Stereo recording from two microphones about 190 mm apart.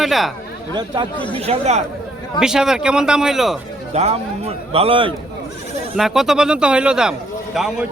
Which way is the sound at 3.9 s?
35° right (ahead or behind).